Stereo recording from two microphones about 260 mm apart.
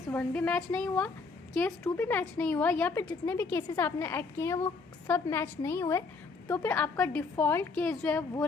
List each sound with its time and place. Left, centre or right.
0.1 s a woman's voice: centre